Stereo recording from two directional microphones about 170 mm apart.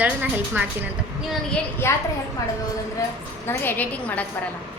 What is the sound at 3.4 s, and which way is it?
Speech, 15° left (ahead or behind).